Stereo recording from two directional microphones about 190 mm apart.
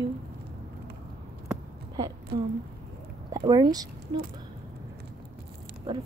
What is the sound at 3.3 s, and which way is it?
Speech, 20° right (ahead or behind).